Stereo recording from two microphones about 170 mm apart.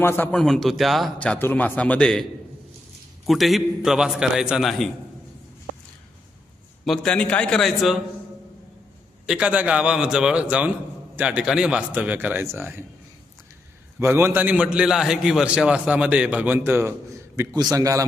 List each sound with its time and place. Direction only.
0.0 s a man's voice: 10° left (ahead or behind)
3.2 s a man's voice: centre (ahead or behind)
6.8 s a man's voice: 5° left (ahead or behind)
9.2 s a man's voice: 5° right (ahead or behind)
14.0 s a man's voice: 15° right (ahead or behind)